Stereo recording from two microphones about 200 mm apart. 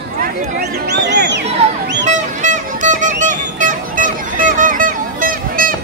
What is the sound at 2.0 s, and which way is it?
Music, 40° right (ahead or behind).